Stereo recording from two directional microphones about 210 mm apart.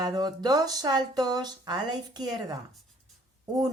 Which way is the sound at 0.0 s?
20° right (ahead or behind).